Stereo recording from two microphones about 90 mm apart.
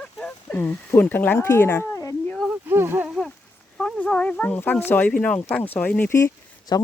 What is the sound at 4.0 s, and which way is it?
Speech, 15° left (ahead or behind).